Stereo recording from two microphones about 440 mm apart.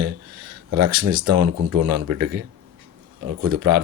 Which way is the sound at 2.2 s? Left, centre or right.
Right.